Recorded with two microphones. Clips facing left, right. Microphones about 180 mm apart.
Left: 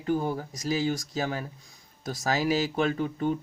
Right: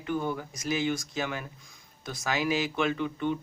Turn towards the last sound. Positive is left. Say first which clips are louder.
# left 2 dB
turn(degrees=40)  # may be behind; listen again after turning